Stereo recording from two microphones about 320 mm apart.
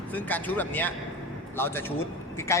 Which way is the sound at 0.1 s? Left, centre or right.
Centre.